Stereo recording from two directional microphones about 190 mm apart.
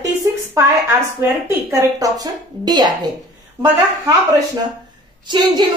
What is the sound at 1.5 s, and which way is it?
Child singing, 15° right (ahead or behind).